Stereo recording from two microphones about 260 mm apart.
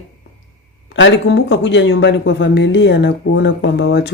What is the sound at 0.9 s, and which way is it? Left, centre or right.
Speech, left.